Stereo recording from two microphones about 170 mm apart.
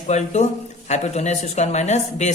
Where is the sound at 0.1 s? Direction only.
45° left (ahead or behind).